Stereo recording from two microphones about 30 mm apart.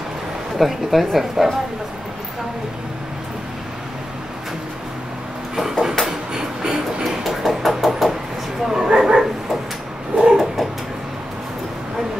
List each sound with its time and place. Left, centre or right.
0.6 s speech: centre
5.6 s a sound: centre
6.3 s train: right
7.2 s a sound: centre
8.6 s bow-wow: centre
10.3 s bird: centre